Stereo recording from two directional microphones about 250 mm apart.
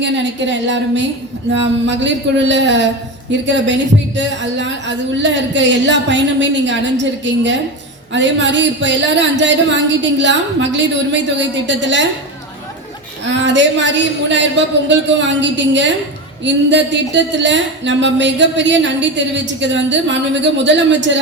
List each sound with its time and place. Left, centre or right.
0.0 s a woman's voice: right
13.2 s a woman's voice: right